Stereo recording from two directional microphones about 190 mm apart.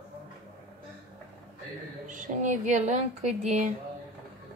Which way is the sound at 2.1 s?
40° right (ahead or behind).